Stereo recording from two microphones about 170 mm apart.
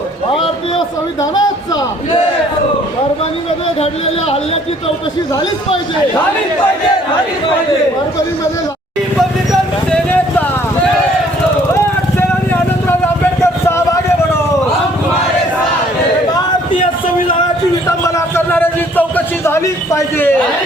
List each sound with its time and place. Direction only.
1.2 s speech: 20° left (ahead or behind)
3.8 s speech: 35° left (ahead or behind)
9.5 s vehicle: 5° left (ahead or behind)
13.4 s vehicle: 15° left (ahead or behind)
17.8 s a sound: 15° left (ahead or behind)